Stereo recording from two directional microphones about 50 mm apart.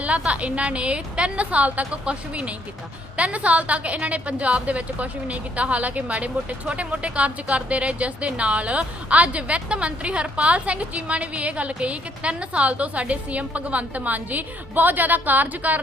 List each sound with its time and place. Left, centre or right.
0.2 s a woman's voice: right